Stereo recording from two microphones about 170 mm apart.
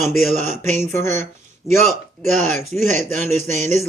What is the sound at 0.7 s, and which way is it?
Speech, 15° left (ahead or behind).